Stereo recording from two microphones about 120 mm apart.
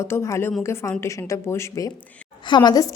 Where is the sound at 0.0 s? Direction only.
25° left (ahead or behind).